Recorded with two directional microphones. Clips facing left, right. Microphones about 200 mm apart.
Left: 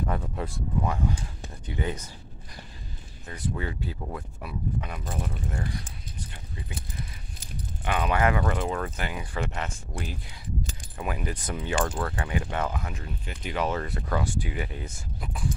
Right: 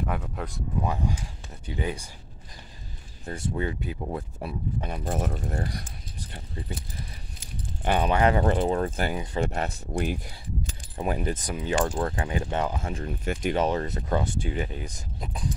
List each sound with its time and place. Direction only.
0.0 s speech: centre (ahead or behind)
0.7 s speech: 15° right (ahead or behind)
3.3 s speech: 25° right (ahead or behind)
4.1 s speech: 30° right (ahead or behind)
5.0 s speech: 45° right (ahead or behind)
7.8 s speech: 35° right (ahead or behind)
11.3 s speech: 15° right (ahead or behind)
12.0 s speech: 30° right (ahead or behind)
13.0 s speech: 50° right (ahead or behind)
13.6 s speech: 20° right (ahead or behind)